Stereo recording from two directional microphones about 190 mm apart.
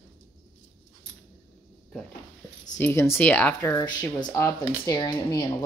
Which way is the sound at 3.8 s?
20° left (ahead or behind).